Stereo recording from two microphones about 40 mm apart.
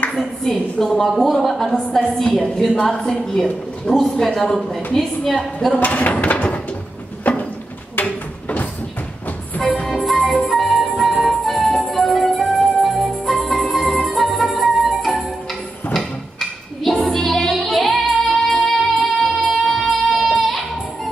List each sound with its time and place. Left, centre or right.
0.4 s a woman's voice: centre
5.8 s speech: left
6.3 s a sound: left
9.8 s music: centre
15.9 s drawer open or close: centre
17.1 s music: centre